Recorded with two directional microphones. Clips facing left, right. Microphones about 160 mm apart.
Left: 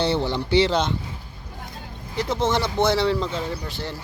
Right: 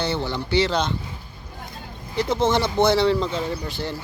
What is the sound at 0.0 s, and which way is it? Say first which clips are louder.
Speech: left 3 dB; 30° left (ahead or behind).